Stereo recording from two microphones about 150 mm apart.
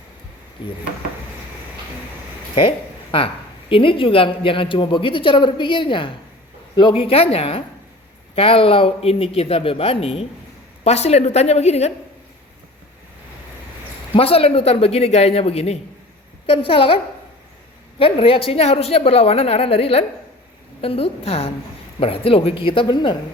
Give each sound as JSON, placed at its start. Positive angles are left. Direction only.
{"t": 0.6, "sound": "a man's voice", "side_deg": 35}
{"t": 2.6, "sound": "a man's voice", "side_deg": 35}
{"t": 14.2, "sound": "a man's voice", "side_deg": 40}
{"t": 18.0, "sound": "a man's voice", "side_deg": 40}